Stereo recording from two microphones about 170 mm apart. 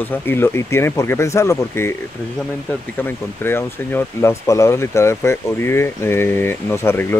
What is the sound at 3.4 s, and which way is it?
Speech, 15° left (ahead or behind).